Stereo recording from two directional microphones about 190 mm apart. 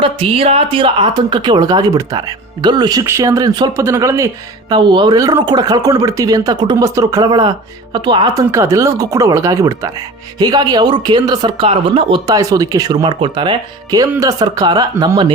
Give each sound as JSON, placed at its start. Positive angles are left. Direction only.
{"t": 0.0, "sound": "speech", "side_deg": -30}